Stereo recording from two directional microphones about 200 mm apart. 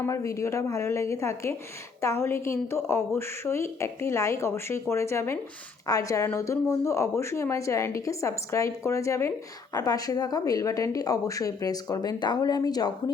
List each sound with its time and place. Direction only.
0.0 s a woman's voice: 15° left (ahead or behind)